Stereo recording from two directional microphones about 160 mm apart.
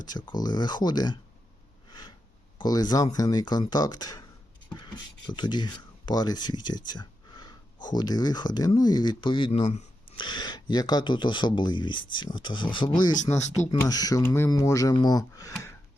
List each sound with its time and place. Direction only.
0.0 s speech: 30° left (ahead or behind)
1.9 s a sound: 25° left (ahead or behind)
2.6 s speech: 25° left (ahead or behind)